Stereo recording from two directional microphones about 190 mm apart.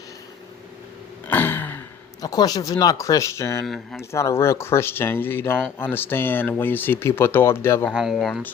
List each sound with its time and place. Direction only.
1.3 s a sound: 10° left (ahead or behind)
2.2 s speech: 20° left (ahead or behind)
7.9 s speech: centre (ahead or behind)